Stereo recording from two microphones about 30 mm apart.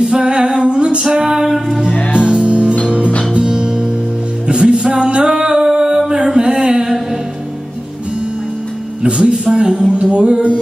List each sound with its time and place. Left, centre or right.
0.0 s music: right
1.1 s music: right
2.1 s music: right
3.3 s music: right
6.2 s a sound: right
9.0 s speech: right
10.1 s music: right